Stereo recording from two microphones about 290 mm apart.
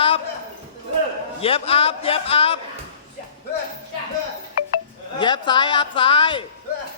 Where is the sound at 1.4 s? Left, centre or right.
Centre.